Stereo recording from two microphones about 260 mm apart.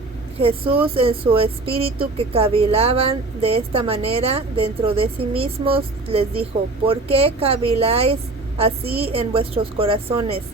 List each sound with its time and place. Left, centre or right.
0.3 s speech: right